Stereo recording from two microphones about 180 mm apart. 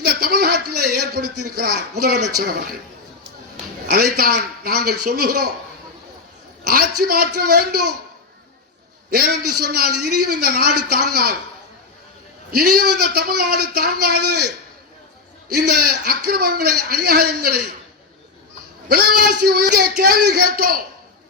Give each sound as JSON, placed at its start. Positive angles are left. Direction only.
{"t": 0.0, "sound": "a man's voice", "side_deg": -60}
{"t": 3.8, "sound": "a man's voice", "side_deg": -55}
{"t": 6.7, "sound": "a man's voice", "side_deg": -55}
{"t": 9.0, "sound": "a man's voice", "side_deg": -55}
{"t": 12.5, "sound": "a man's voice", "side_deg": -60}
{"t": 15.5, "sound": "a man's voice", "side_deg": -60}
{"t": 18.9, "sound": "a man's voice", "side_deg": -60}